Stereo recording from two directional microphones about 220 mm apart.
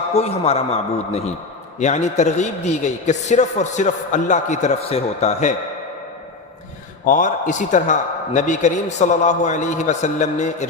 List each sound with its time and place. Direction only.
0.1 s a man's voice: 30° left (ahead or behind)
7.0 s a man's voice: 35° left (ahead or behind)